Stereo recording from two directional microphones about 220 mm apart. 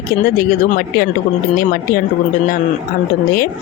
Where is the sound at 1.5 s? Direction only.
40° left (ahead or behind).